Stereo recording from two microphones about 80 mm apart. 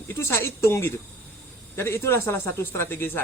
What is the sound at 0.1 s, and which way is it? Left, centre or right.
Speech, left.